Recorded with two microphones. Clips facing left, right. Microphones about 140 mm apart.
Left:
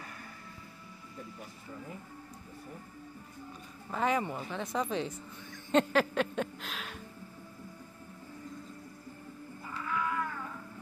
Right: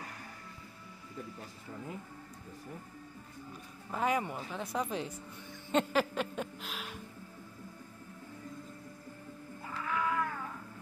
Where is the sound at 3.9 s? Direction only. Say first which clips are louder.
Left 1 dB; 5° right (ahead or behind).